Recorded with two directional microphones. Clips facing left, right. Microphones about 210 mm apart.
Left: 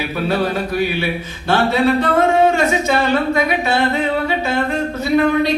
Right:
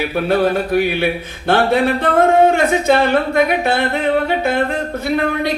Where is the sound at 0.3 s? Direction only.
55° right (ahead or behind).